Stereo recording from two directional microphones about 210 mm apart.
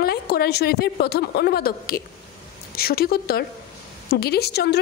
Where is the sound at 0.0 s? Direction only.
50° left (ahead or behind).